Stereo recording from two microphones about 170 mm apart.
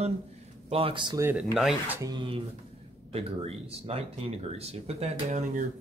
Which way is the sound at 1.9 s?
25° right (ahead or behind).